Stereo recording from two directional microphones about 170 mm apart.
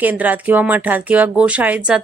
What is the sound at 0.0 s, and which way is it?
Speech, 10° right (ahead or behind).